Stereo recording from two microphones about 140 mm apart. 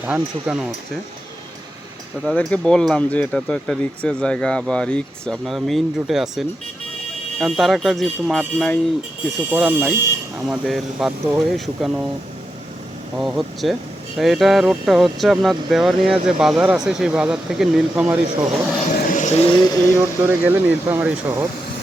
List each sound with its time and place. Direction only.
0.0 s speech: 10° right (ahead or behind)
2.2 s speech: 5° left (ahead or behind)
9.5 s speech: 15° right (ahead or behind)
10.4 s speech: centre (ahead or behind)
13.1 s speech: centre (ahead or behind)
18.9 s vehicle: 65° left (ahead or behind); by 19.5 s 50° left (ahead or behind)
20.0 s speech: 15° right (ahead or behind)